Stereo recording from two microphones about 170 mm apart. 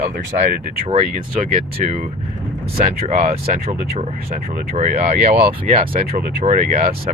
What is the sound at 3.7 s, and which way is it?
Speech, 70° right (ahead or behind).